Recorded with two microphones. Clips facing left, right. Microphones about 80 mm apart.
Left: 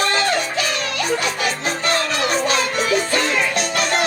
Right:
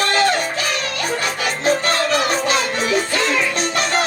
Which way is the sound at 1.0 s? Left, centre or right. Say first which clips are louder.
Left 2 dB; right.